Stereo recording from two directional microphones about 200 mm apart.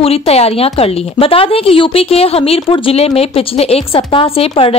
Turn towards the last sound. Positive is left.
turn(degrees=30)  # may be behind; listen again after turning